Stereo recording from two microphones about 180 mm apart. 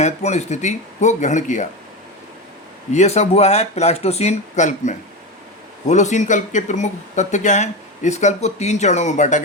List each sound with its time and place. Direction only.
0.0 s speech: 40° left (ahead or behind)
2.9 s speech: 40° left (ahead or behind)